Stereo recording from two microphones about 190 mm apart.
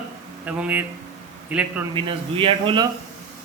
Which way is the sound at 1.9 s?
25° right (ahead or behind).